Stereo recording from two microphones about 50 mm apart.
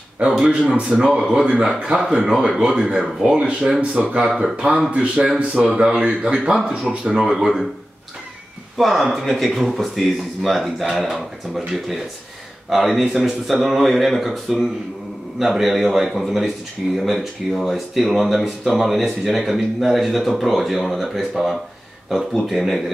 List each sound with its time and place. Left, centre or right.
0.2 s speech: centre
0.8 s speech: centre
4.3 s speech: centre
4.6 s speech: centre
5.4 s speech: right
5.7 s speech: centre
8.7 s speech: centre